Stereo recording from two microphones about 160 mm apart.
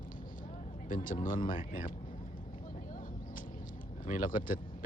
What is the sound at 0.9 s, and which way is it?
A man's voice, 60° left (ahead or behind).